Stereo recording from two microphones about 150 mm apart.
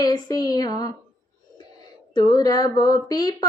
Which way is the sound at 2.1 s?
25° left (ahead or behind).